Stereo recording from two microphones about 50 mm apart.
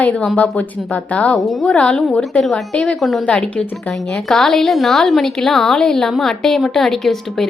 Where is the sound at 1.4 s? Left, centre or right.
Centre.